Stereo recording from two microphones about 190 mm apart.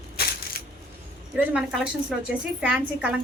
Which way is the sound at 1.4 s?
5° right (ahead or behind).